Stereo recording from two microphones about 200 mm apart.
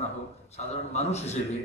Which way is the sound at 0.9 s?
35° left (ahead or behind).